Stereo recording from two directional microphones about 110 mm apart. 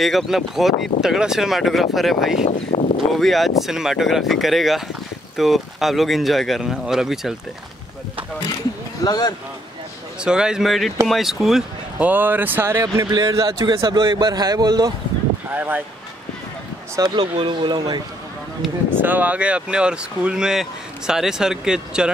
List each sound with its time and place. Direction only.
0.0 s speech: centre (ahead or behind)
2.4 s speech: 90° left
3.2 s speech: centre (ahead or behind)
9.0 s speech: 40° left (ahead or behind)
10.2 s speech: 5° right (ahead or behind)
12.0 s a man's voice: 15° right (ahead or behind); by 14.9 s 35° right (ahead or behind)
15.5 s speech: 15° right (ahead or behind)
16.9 s a man's voice: 40° right (ahead or behind)
18.9 s speech: 15° right (ahead or behind)